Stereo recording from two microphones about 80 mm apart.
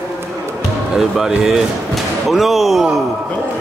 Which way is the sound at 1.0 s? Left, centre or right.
Centre.